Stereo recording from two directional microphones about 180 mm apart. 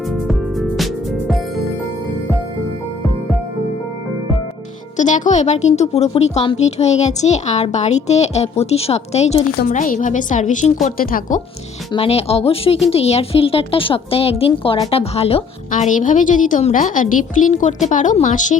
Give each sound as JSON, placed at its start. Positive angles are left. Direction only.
{"t": 0.1, "sound": "music", "side_deg": 0}
{"t": 4.9, "sound": "a woman's voice", "side_deg": 45}
{"t": 9.6, "sound": "a woman's voice", "side_deg": 45}
{"t": 11.9, "sound": "a woman's voice", "side_deg": 35}
{"t": 15.7, "sound": "a woman's voice", "side_deg": 45}